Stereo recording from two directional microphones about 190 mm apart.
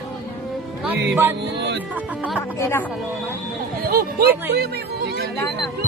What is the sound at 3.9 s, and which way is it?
Speech, 50° right (ahead or behind).